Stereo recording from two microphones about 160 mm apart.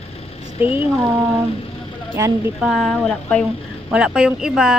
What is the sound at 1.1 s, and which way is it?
Speech, 15° right (ahead or behind).